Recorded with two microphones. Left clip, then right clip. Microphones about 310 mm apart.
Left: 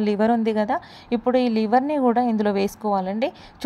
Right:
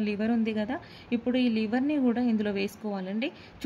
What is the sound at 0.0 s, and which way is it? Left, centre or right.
A woman's voice, left.